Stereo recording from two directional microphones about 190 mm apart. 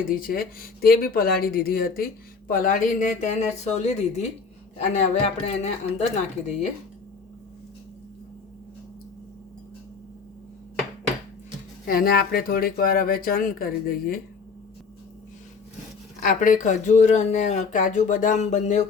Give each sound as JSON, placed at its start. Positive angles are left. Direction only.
{"t": 0.1, "sound": "speech", "side_deg": 50}
{"t": 11.9, "sound": "speech", "side_deg": 50}
{"t": 16.2, "sound": "speech", "side_deg": 45}